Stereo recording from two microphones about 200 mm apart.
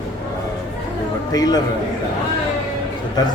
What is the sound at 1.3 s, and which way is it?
Speech, 20° left (ahead or behind).